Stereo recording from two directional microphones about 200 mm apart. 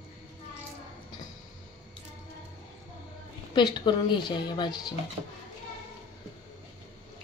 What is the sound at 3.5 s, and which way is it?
A woman's voice, 20° left (ahead or behind).